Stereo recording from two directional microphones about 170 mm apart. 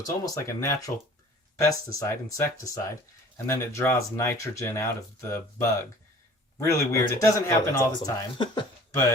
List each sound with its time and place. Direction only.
0.0 s speech: 15° left (ahead or behind)